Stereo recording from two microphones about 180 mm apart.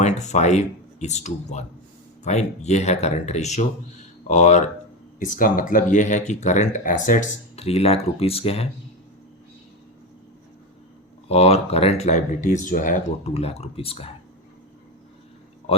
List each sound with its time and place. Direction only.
0.0 s speech: 40° left (ahead or behind)
11.3 s speech: 35° left (ahead or behind)